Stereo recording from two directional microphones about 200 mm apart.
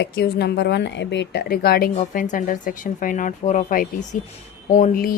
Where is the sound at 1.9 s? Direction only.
40° left (ahead or behind).